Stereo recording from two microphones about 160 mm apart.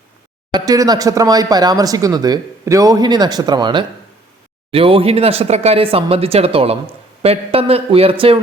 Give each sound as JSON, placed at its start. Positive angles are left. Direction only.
{"t": 0.5, "sound": "speech", "side_deg": -25}